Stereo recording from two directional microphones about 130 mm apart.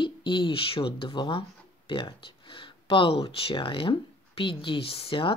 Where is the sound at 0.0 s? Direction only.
40° left (ahead or behind).